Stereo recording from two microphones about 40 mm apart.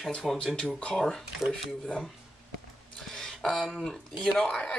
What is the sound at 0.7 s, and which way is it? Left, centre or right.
Speech, left.